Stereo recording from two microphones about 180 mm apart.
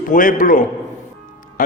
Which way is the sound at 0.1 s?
50° left (ahead or behind).